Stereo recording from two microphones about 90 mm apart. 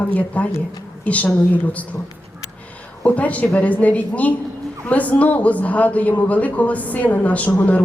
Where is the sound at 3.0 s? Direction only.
15° left (ahead or behind).